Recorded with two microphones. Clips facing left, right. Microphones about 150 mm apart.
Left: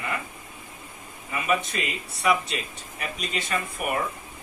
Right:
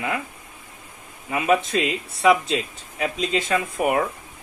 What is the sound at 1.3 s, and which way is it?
A man's voice, 90° right.